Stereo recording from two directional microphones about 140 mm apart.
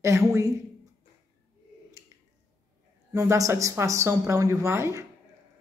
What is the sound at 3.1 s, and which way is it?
Speech, 25° right (ahead or behind).